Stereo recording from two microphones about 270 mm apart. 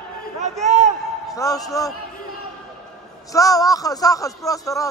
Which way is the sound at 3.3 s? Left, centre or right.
Centre.